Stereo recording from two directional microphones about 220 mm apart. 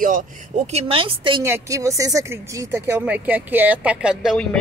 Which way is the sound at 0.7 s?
25° right (ahead or behind).